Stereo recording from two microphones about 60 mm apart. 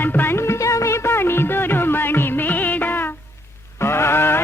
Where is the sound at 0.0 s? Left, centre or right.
Left.